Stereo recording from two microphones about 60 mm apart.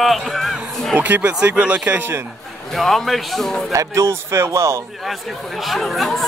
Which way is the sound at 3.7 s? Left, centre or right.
Right.